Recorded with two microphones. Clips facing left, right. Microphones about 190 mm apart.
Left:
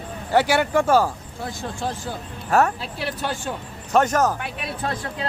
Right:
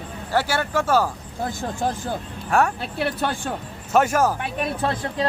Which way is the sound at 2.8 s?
55° right (ahead or behind).